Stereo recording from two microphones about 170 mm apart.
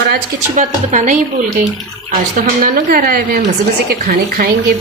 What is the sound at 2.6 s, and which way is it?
Speech, 55° right (ahead or behind).